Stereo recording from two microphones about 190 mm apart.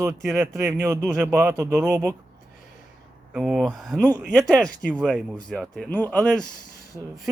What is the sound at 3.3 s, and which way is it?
Speech, 5° right (ahead or behind).